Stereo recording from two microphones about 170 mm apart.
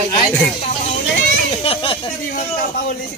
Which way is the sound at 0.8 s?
40° left (ahead or behind).